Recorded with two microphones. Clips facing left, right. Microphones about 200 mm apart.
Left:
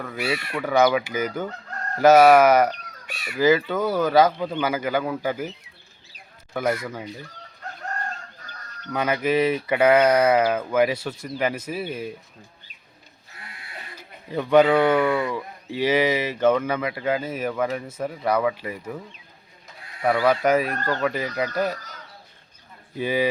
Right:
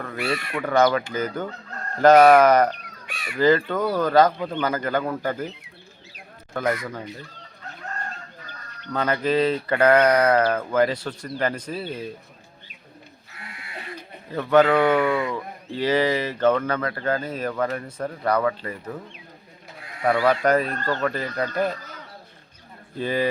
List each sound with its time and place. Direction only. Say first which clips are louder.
0.0 s speech: even; 5° left (ahead or behind)
3.1 s speech: right 1 dB; 40° left (ahead or behind)
3.3 s speech: even; 5° left (ahead or behind)
6.5 s speech: even; 10° left (ahead or behind)
8.9 s speech: even; 10° left (ahead or behind)
14.3 s speech: left 1 dB; 15° left (ahead or behind)
20.1 s speech: even; 5° left (ahead or behind)
23.0 s speech: left 1 dB; 10° left (ahead or behind)